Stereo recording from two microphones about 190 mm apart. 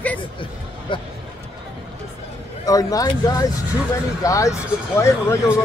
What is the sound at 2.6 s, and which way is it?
Speech, 20° left (ahead or behind).